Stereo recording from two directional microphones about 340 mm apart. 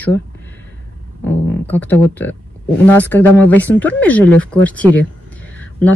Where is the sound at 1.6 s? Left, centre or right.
Centre.